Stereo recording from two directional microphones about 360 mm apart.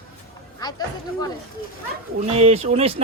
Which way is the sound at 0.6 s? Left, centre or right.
Centre.